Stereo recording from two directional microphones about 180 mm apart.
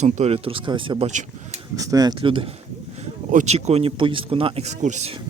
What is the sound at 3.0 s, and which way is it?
Speech, 40° right (ahead or behind).